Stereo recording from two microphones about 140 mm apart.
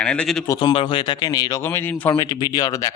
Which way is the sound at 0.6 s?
35° left (ahead or behind).